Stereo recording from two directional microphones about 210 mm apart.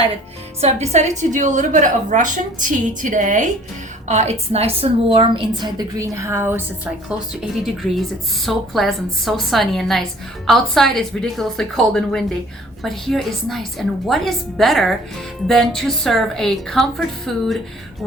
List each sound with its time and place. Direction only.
0.6 s a woman's voice: 30° right (ahead or behind); by 6.6 s 10° right (ahead or behind)
7.6 s a woman's voice: centre (ahead or behind)